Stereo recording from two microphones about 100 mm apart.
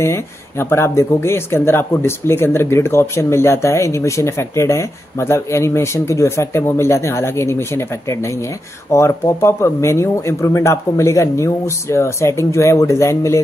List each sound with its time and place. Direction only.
0.0 s speech: 25° left (ahead or behind)